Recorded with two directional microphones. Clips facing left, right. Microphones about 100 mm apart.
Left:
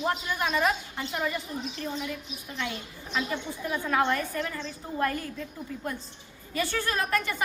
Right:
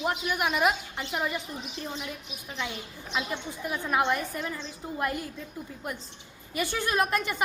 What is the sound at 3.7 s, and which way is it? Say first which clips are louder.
A woman's voice: even; 20° right (ahead or behind).